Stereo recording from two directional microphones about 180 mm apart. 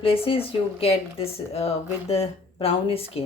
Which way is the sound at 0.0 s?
30° left (ahead or behind).